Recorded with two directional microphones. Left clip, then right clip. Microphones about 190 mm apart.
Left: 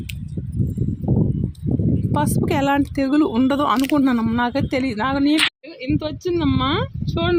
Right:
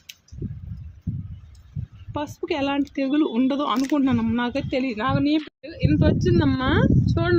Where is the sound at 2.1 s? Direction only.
40° left (ahead or behind).